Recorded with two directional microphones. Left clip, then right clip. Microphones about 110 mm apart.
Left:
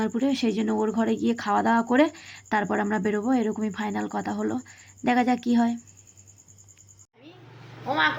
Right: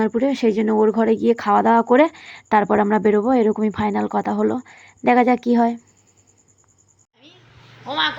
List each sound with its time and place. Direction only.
0.0 s speech: 35° right (ahead or behind)
7.9 s speech: 5° left (ahead or behind)